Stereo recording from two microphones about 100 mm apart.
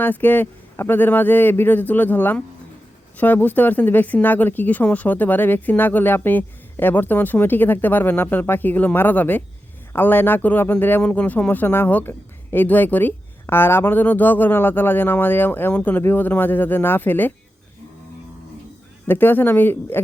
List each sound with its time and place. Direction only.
0.0 s a man's voice: 20° left (ahead or behind)
19.0 s a man's voice: 20° left (ahead or behind)